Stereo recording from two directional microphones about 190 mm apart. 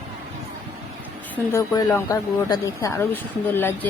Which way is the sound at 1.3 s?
15° left (ahead or behind).